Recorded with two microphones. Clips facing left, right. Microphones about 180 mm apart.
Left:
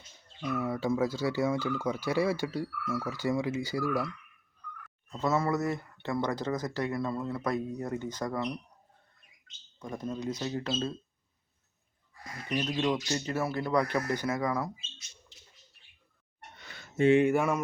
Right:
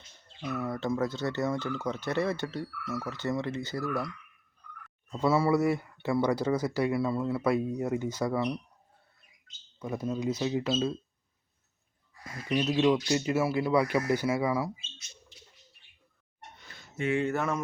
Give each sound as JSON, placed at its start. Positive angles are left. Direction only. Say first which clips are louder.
{"t": 0.5, "sound": "speech", "louder": "left 1 dB", "side_deg": 10}
{"t": 5.2, "sound": "speech", "louder": "right 4 dB", "side_deg": -10}
{"t": 9.8, "sound": "speech", "louder": "right 4 dB", "side_deg": -5}
{"t": 12.8, "sound": "speech", "louder": "right 5 dB", "side_deg": -10}
{"t": 17.0, "sound": "speech", "louder": "left 7 dB", "side_deg": 25}
{"t": 17.2, "sound": "speech", "louder": "left 3 dB", "side_deg": 10}